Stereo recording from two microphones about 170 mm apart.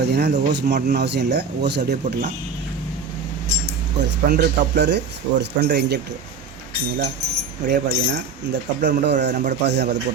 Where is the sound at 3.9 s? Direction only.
90° right.